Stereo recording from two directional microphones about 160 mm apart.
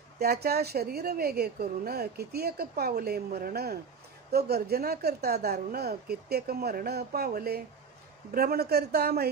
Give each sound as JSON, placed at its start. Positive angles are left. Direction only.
{"t": 0.2, "sound": "a woman's voice", "side_deg": -80}